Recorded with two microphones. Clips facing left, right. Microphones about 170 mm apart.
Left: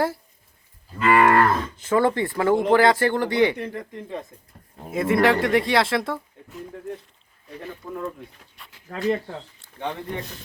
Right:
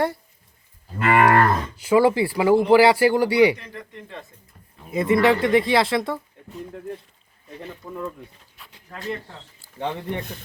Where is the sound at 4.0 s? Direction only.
15° left (ahead or behind).